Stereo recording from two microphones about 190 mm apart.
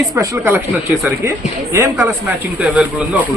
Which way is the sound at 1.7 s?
15° right (ahead or behind).